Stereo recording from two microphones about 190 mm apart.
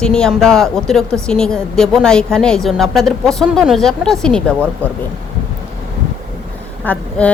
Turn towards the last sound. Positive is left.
turn(degrees=5)  # may be behind; listen again after turning